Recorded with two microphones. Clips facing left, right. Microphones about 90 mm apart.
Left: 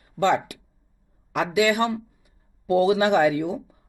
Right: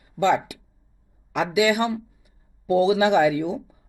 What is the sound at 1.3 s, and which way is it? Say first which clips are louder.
Speech: right 1 dB; 15° right (ahead or behind).